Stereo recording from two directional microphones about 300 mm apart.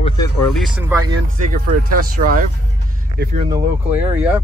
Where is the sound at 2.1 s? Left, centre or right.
Right.